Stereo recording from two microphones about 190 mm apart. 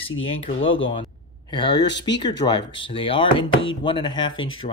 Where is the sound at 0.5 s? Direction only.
90° left.